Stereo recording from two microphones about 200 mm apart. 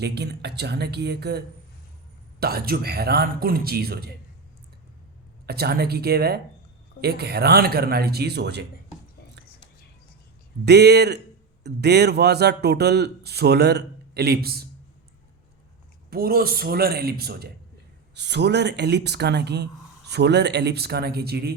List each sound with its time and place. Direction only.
0.0 s a man's voice: 55° right (ahead or behind)
5.5 s speech: 50° right (ahead or behind)
10.7 s a man's voice: 55° right (ahead or behind)
16.0 s a man's voice: 50° right (ahead or behind)